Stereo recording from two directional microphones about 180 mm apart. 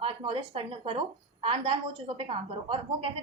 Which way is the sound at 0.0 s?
30° right (ahead or behind).